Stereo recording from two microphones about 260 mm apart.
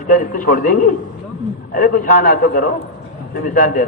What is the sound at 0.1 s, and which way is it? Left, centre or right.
A man's voice, left.